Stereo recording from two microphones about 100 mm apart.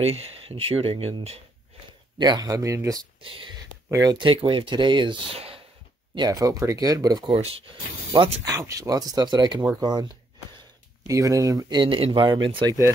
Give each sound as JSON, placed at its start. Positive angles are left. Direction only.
{"t": 0.0, "sound": "speech", "side_deg": -90}
{"t": 2.1, "sound": "speech", "side_deg": -45}
{"t": 3.2, "sound": "speech", "side_deg": -60}
{"t": 3.9, "sound": "speech", "side_deg": -35}
{"t": 4.2, "sound": "speech", "side_deg": -60}
{"t": 5.3, "sound": "a sound", "side_deg": -70}
{"t": 6.1, "sound": "speech", "side_deg": -40}
{"t": 8.5, "sound": "speech", "side_deg": -35}
{"t": 11.8, "sound": "speech", "side_deg": -55}
{"t": 12.6, "sound": "speech", "side_deg": -30}